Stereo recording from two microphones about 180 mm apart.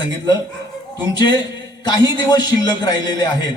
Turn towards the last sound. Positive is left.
turn(degrees=25)  # may be behind; listen again after turning